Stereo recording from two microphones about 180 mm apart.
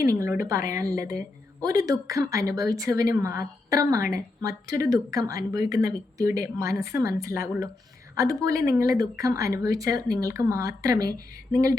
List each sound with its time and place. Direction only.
0.0 s a woman's voice: 15° right (ahead or behind)